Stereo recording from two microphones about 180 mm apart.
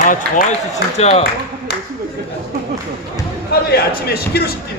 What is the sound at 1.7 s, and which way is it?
Clapping, 60° left (ahead or behind).